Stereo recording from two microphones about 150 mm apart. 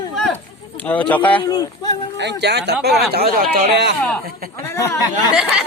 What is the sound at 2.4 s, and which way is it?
Speech, 90° right.